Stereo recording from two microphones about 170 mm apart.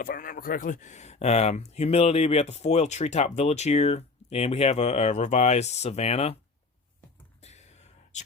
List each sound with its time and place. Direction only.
0.0 s speech: 55° left (ahead or behind); by 6.3 s 40° left (ahead or behind)
7.4 s whispering: 40° left (ahead or behind)